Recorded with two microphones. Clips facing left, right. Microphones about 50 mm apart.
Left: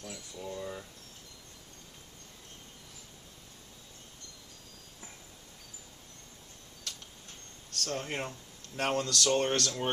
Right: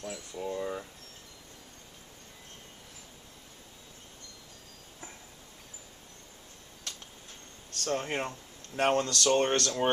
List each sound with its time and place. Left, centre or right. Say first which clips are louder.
0.4 s speech: right 5 dB; right
7.8 s speech: right 4 dB; centre
9.1 s speech: right 2 dB; centre